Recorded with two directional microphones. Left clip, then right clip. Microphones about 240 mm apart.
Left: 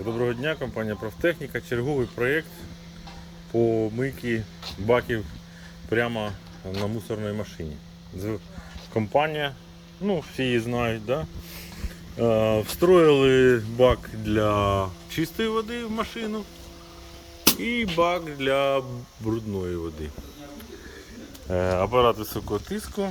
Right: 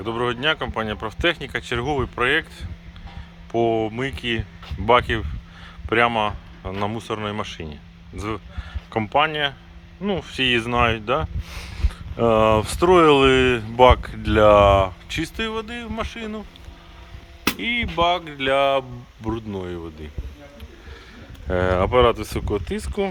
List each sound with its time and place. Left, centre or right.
0.0 s speech: centre
3.6 s speech: centre
9.1 s speech: right
10.4 s speech: centre
15.1 s speech: centre
17.6 s speech: centre
21.5 s speech: right
22.1 s speech: right